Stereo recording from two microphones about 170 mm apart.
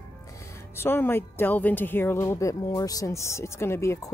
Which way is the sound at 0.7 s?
15° left (ahead or behind).